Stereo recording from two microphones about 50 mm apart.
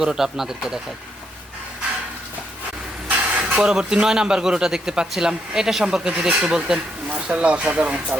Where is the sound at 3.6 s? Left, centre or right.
Centre.